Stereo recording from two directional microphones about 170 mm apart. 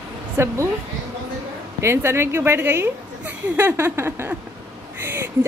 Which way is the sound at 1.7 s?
15° right (ahead or behind).